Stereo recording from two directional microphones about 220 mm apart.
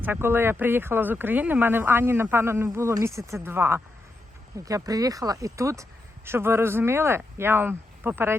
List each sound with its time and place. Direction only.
0.0 s speech: 10° right (ahead or behind)